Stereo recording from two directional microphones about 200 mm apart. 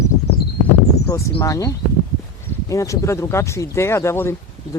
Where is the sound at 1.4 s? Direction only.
15° left (ahead or behind).